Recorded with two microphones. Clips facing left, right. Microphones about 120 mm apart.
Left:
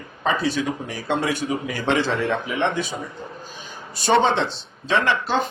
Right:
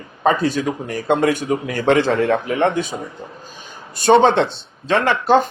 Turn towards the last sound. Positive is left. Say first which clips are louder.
# right 7 dB
turn(degrees=-50)  # may be behind; listen again after turning